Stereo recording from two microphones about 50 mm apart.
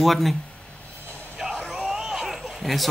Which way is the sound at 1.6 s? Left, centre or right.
Centre.